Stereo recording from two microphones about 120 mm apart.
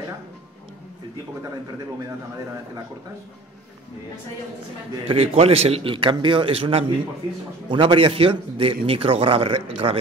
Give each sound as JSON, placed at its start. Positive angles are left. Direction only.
{"t": 5.0, "sound": "a man's voice", "side_deg": -55}